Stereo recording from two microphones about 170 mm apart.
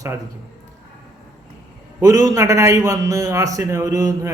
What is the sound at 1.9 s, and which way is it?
A man's voice, 20° right (ahead or behind).